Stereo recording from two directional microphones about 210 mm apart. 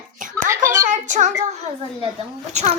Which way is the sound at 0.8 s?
35° right (ahead or behind).